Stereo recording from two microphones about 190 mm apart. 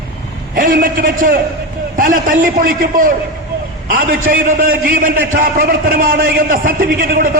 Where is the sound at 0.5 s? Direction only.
50° right (ahead or behind).